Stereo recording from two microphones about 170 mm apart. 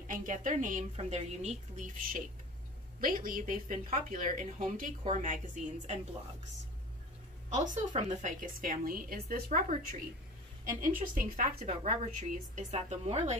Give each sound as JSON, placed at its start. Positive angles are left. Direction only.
{"t": 0.0, "sound": "a woman's voice", "side_deg": -50}
{"t": 3.0, "sound": "a woman's voice", "side_deg": -55}
{"t": 7.5, "sound": "a woman's voice", "side_deg": -45}